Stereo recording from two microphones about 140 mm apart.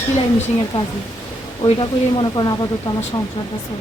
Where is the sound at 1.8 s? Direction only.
30° left (ahead or behind).